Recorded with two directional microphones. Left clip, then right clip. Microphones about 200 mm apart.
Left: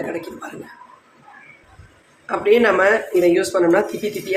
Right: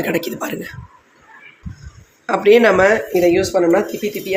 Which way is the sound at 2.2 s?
45° right (ahead or behind).